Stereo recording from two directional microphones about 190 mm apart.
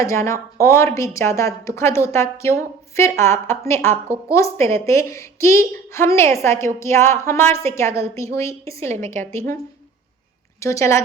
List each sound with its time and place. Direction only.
0.0 s a woman's voice: 15° left (ahead or behind)
10.6 s a woman's voice: 15° left (ahead or behind)